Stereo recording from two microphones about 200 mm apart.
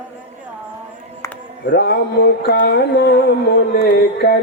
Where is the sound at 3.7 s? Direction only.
50° left (ahead or behind).